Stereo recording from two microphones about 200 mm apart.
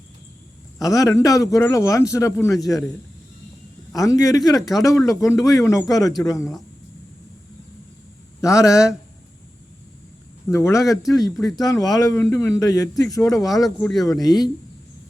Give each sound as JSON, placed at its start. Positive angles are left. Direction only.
{"t": 0.8, "sound": "a man's voice", "side_deg": 15}
{"t": 2.6, "sound": "speech", "side_deg": 0}
{"t": 3.9, "sound": "a man's voice", "side_deg": 15}
{"t": 8.4, "sound": "a man's voice", "side_deg": 15}
{"t": 10.5, "sound": "a man's voice", "side_deg": 15}
{"t": 13.5, "sound": "speech", "side_deg": 0}
{"t": 14.2, "sound": "speech", "side_deg": 20}